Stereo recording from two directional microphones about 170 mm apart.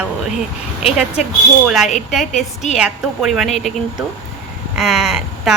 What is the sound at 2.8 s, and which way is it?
A woman's voice, centre (ahead or behind).